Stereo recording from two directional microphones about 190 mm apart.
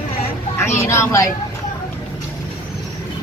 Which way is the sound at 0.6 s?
15° left (ahead or behind).